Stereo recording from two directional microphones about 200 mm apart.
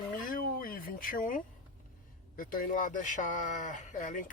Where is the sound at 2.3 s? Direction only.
45° left (ahead or behind).